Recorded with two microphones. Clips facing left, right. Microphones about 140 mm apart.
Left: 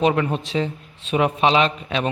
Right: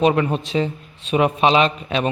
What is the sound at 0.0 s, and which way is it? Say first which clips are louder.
A man's voice: right 2 dB; 20° right (ahead or behind).